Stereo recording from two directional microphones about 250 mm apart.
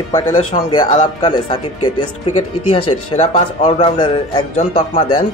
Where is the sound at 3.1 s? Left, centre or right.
Left.